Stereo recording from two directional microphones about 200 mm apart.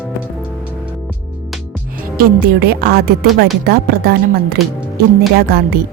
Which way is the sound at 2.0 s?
45° right (ahead or behind).